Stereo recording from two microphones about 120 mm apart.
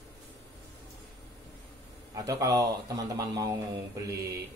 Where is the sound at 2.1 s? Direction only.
30° right (ahead or behind).